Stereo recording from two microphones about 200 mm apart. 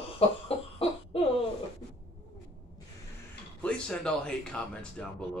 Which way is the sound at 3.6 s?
5° left (ahead or behind).